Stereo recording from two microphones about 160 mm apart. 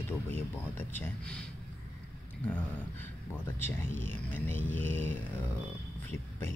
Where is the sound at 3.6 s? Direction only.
15° left (ahead or behind).